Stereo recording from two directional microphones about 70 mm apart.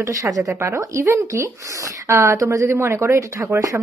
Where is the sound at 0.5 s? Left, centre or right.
Right.